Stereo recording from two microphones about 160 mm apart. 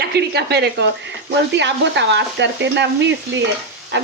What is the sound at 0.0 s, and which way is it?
Speech, 90° right.